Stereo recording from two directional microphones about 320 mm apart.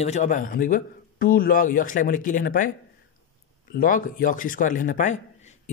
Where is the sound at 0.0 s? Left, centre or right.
Left.